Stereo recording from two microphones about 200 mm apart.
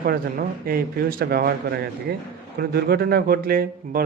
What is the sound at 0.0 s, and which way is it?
Speech, 50° right (ahead or behind).